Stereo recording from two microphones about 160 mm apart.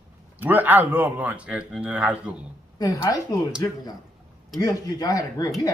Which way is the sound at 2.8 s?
20° left (ahead or behind).